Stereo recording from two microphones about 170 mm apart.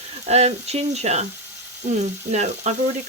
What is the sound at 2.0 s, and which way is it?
Frying, 45° right (ahead or behind).